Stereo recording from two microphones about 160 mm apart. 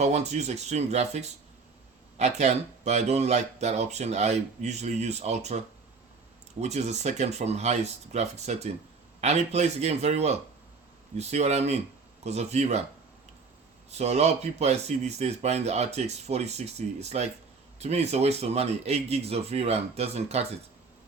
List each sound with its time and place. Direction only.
0.0 s speech: 45° right (ahead or behind)
13.9 s a man's voice: 45° right (ahead or behind)